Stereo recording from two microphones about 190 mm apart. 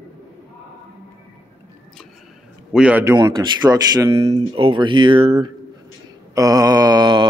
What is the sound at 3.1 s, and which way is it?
A man's voice, 20° right (ahead or behind).